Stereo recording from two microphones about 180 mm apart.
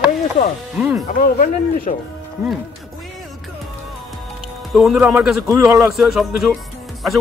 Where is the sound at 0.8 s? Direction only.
5° right (ahead or behind).